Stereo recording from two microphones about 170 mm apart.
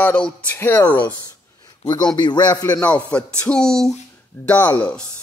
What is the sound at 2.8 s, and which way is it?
Speech, 5° left (ahead or behind).